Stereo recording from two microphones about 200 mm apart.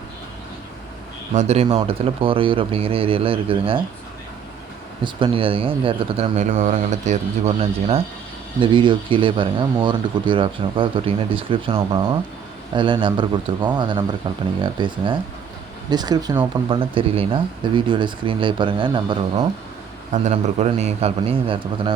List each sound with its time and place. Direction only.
1.4 s speech: 30° right (ahead or behind)
5.0 s speech: 25° right (ahead or behind)